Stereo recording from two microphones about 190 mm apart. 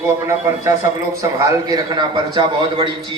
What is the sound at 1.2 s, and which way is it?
A man's voice, 20° right (ahead or behind).